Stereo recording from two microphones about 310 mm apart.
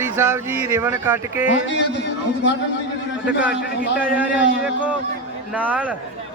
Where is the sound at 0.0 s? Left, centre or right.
Centre.